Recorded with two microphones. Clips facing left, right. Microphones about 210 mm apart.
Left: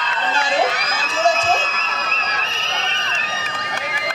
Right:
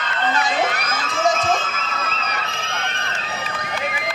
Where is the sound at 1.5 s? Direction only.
55° right (ahead or behind).